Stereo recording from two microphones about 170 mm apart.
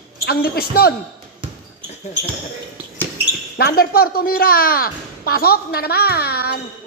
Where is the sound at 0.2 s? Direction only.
65° left (ahead or behind).